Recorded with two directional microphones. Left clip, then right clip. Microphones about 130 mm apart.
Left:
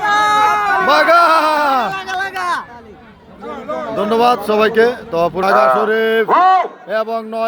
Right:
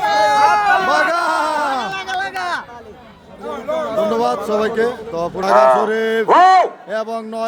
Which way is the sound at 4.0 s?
25° left (ahead or behind).